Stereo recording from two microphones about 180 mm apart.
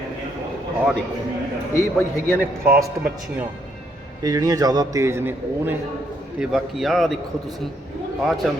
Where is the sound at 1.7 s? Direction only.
15° left (ahead or behind).